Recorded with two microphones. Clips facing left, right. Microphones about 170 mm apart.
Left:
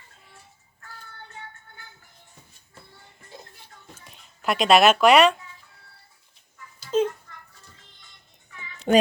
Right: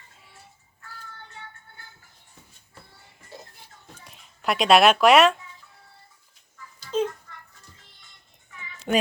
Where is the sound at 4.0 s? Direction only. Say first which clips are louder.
Even; centre (ahead or behind).